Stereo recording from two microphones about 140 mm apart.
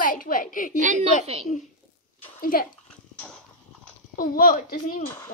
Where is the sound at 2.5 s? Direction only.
90° left.